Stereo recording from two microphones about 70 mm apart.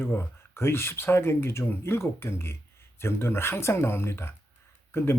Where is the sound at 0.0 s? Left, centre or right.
Left.